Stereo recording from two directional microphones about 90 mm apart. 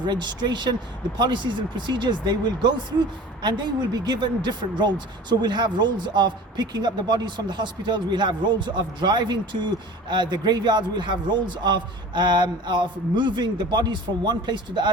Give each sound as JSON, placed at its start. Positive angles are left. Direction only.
{"t": 0.0, "sound": "speech", "side_deg": -55}